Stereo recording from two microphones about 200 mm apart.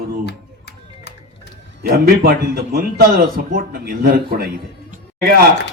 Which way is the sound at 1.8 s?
50° right (ahead or behind).